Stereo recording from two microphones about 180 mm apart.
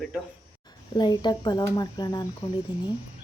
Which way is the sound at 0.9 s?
25° left (ahead or behind).